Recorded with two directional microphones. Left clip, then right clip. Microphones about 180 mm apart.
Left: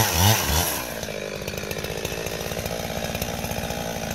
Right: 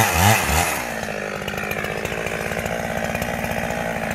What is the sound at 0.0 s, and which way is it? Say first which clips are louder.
Chainsaw: right 5 dB; 35° left (ahead or behind).